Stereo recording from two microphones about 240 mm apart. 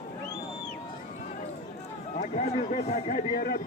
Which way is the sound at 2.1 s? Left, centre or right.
Left.